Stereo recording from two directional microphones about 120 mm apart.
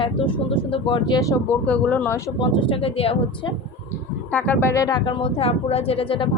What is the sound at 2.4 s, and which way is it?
Speech, 40° left (ahead or behind).